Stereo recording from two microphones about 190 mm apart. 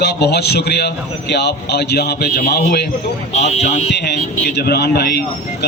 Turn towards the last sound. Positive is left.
turn(degrees=60)  # may be behind; listen again after turning